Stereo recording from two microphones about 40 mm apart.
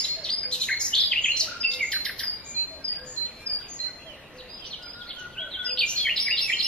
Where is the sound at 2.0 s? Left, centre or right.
Left.